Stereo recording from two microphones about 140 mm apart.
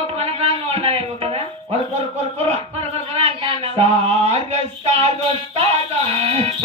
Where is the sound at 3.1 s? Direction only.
45° right (ahead or behind).